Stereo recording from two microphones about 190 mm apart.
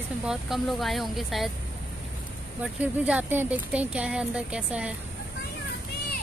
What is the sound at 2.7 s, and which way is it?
Speech, 5° right (ahead or behind).